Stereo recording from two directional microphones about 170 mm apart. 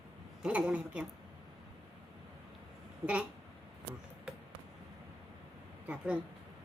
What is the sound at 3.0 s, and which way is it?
Speech, 5° right (ahead or behind).